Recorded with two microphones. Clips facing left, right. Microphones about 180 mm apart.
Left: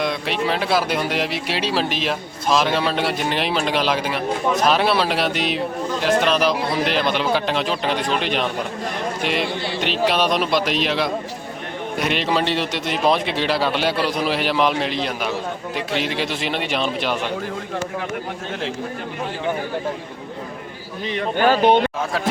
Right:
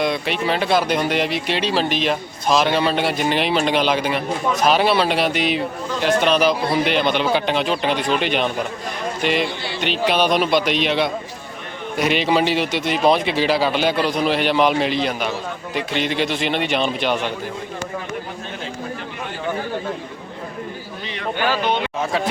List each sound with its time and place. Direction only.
0.0 s speech: centre (ahead or behind)
21.1 s speech: 45° left (ahead or behind)